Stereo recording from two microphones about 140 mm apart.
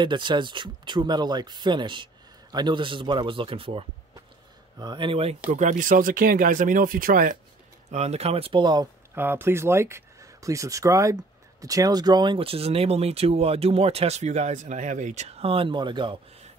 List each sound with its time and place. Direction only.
0.0 s speech: 35° right (ahead or behind)
5.5 s speech: 65° right (ahead or behind); by 7.3 s 85° right
7.9 s speech: 50° right (ahead or behind); by 8.8 s 35° right (ahead or behind)
9.1 s speech: 15° right (ahead or behind); by 16.2 s 35° right (ahead or behind)